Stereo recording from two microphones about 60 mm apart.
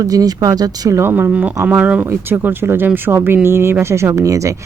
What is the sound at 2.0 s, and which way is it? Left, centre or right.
Speech, right.